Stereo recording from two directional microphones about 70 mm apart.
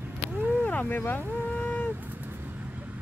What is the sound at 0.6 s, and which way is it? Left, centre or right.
Speech, left.